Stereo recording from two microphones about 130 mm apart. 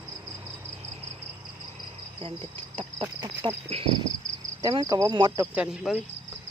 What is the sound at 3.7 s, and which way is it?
Speech, 45° right (ahead or behind).